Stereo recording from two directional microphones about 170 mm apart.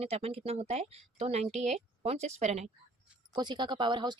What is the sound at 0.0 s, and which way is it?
Speech, 35° right (ahead or behind).